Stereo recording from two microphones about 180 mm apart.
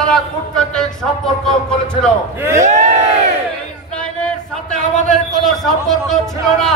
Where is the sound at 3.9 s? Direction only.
5° left (ahead or behind).